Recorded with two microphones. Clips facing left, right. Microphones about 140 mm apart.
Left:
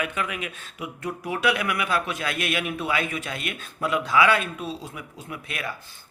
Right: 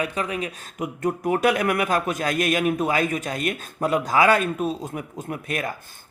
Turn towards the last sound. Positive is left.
turn(degrees=-45)  # may be behind; listen again after turning